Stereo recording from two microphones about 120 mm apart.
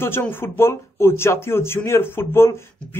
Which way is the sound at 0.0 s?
20° left (ahead or behind).